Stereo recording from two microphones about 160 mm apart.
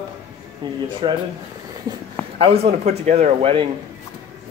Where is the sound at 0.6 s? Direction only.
30° right (ahead or behind).